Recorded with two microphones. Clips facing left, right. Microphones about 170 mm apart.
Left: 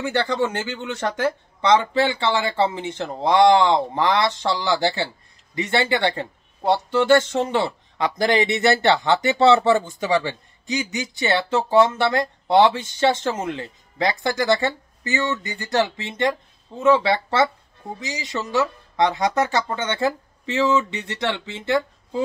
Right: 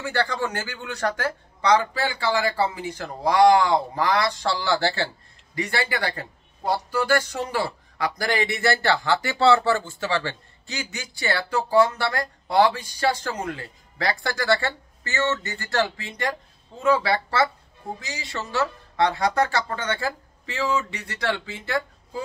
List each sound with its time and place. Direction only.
0.0 s speech: 20° left (ahead or behind)